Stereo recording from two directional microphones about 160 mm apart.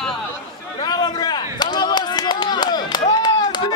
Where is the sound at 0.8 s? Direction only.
25° left (ahead or behind).